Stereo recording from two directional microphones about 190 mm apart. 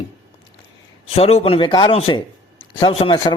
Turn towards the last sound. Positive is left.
turn(degrees=25)  # may be behind; listen again after turning